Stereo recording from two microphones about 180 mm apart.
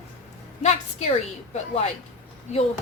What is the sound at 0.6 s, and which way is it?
Speech, 40° left (ahead or behind).